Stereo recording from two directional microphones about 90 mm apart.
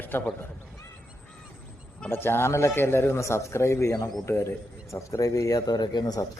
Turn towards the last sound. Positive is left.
turn(degrees=50)  # may be behind; listen again after turning